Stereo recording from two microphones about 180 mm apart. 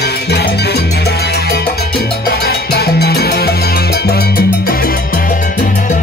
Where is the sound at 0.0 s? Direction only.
65° left (ahead or behind).